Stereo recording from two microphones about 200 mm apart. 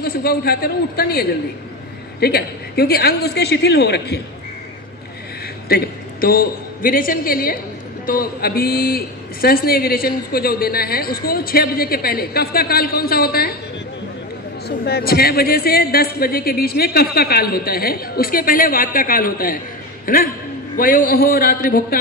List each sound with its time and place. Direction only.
0.0 s a man's voice: 50° left (ahead or behind)
5.7 s a man's voice: 50° left (ahead or behind)
14.9 s a man's voice: 50° left (ahead or behind)